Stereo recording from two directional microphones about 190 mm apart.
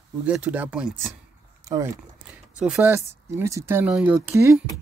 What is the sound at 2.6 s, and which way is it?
Speech, 5° right (ahead or behind).